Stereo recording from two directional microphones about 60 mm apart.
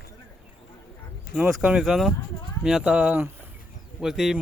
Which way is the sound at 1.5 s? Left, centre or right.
Centre.